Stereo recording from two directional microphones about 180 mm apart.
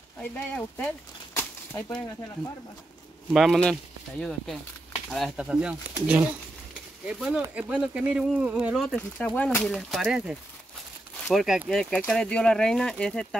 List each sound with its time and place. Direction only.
0.2 s speech: 10° left (ahead or behind)
3.3 s speech: centre (ahead or behind)
8.8 s speech: 5° left (ahead or behind)